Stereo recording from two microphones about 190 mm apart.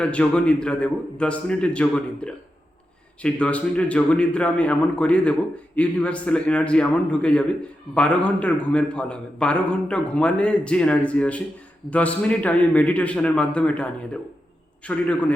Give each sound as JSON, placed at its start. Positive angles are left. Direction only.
{"t": 0.0, "sound": "a man's voice", "side_deg": 5}